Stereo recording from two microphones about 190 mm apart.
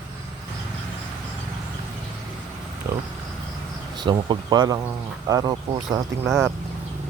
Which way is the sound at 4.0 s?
25° right (ahead or behind).